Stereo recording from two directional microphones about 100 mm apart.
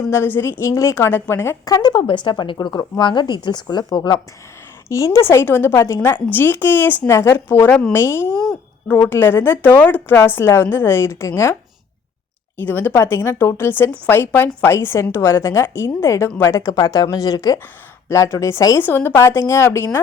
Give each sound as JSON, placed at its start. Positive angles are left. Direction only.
{"t": 0.1, "sound": "speech", "side_deg": 25}
{"t": 1.6, "sound": "speech", "side_deg": 40}
{"t": 2.0, "sound": "a woman's voice", "side_deg": 55}
{"t": 4.9, "sound": "speech", "side_deg": 30}
{"t": 12.5, "sound": "speech", "side_deg": 20}
{"t": 18.8, "sound": "speech", "side_deg": 20}